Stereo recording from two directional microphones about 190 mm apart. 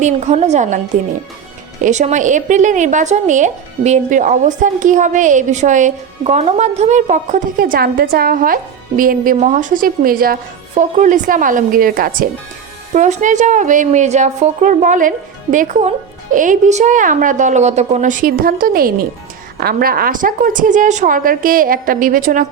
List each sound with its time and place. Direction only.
0.0 s speech: 35° right (ahead or behind)
1.8 s a woman's voice: 40° right (ahead or behind)